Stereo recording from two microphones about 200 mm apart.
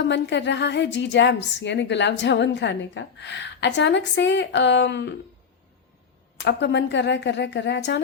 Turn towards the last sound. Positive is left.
turn(degrees=60)  # may be behind; listen again after turning